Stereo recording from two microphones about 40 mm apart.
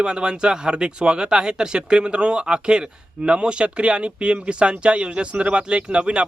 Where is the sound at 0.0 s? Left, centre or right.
Right.